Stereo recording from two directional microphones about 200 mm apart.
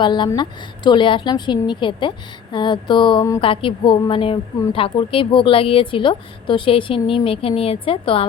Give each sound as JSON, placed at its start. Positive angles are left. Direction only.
{"t": 0.0, "sound": "a woman's voice", "side_deg": 20}